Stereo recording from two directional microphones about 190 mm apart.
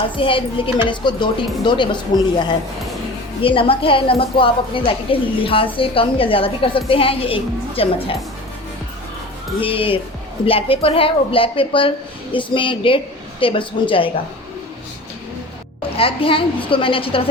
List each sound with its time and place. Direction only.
0.2 s a woman's voice: 25° left (ahead or behind)
3.4 s a woman's voice: 30° left (ahead or behind)
9.6 s a woman's voice: 30° left (ahead or behind)
16.0 s a woman's voice: 30° left (ahead or behind)